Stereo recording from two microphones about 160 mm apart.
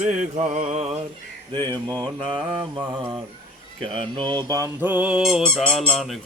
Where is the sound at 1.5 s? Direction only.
25° right (ahead or behind).